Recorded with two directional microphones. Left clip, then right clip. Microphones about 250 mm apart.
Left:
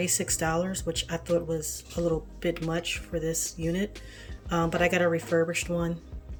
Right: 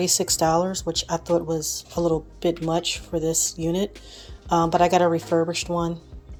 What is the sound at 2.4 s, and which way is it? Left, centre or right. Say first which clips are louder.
Speech: right 8 dB; centre.